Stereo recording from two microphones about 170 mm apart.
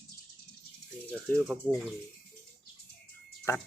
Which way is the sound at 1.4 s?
Centre (ahead or behind).